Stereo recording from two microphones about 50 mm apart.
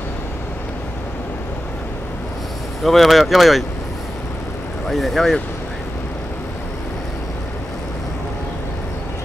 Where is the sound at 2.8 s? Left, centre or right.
Centre.